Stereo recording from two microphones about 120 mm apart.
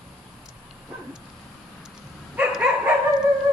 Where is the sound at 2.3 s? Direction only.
10° right (ahead or behind).